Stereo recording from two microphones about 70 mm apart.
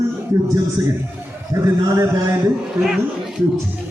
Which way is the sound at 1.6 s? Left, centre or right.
Right.